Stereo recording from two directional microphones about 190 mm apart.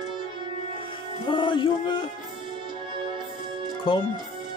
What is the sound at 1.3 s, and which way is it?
Music, 25° left (ahead or behind).